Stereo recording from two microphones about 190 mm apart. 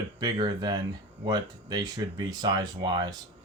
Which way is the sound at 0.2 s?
20° right (ahead or behind).